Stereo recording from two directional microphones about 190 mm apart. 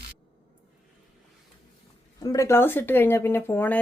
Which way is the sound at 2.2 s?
20° left (ahead or behind).